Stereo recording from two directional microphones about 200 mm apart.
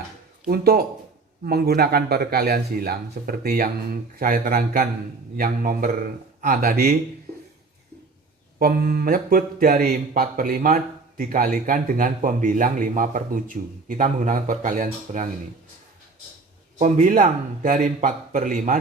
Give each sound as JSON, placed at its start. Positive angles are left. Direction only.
{"t": 0.4, "sound": "speech", "side_deg": -50}
{"t": 8.5, "sound": "speech", "side_deg": -45}
{"t": 16.7, "sound": "speech", "side_deg": -35}